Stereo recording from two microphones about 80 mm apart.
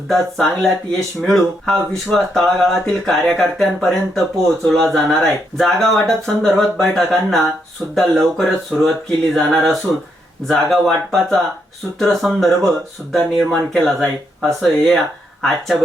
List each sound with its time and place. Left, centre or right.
0.1 s speech: centre